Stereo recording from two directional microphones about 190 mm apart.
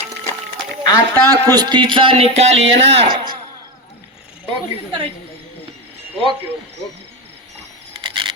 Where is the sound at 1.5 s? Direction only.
25° right (ahead or behind).